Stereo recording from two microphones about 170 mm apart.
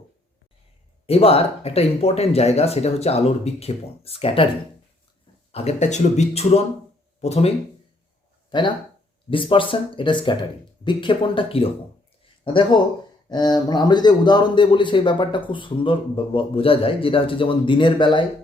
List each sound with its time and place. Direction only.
1.0 s speech: 35° left (ahead or behind)
5.5 s speech: 35° left (ahead or behind)
8.4 s speech: 25° left (ahead or behind)